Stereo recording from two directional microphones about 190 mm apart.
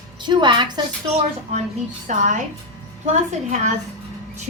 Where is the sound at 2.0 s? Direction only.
40° right (ahead or behind).